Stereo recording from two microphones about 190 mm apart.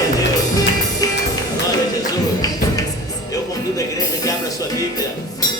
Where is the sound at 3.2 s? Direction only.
20° left (ahead or behind).